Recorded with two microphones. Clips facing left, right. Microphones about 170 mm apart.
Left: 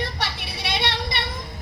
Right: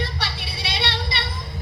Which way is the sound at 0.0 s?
50° left (ahead or behind).